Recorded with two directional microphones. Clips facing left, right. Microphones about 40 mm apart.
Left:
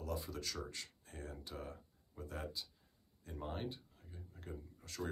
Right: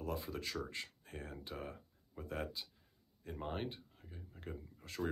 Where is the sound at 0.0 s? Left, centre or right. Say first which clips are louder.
Right 2 dB; right.